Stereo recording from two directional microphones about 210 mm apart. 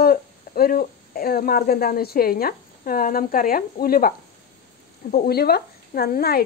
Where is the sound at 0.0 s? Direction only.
45° left (ahead or behind).